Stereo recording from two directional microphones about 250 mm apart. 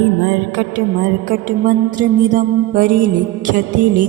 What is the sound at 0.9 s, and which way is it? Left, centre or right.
Music, right.